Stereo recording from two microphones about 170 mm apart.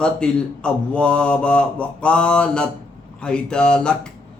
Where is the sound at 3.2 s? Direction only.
5° left (ahead or behind).